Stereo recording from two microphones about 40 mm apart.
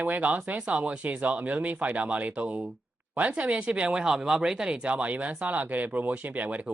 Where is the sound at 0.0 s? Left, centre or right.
Right.